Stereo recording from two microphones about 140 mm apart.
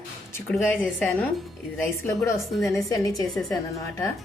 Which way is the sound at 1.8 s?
15° left (ahead or behind).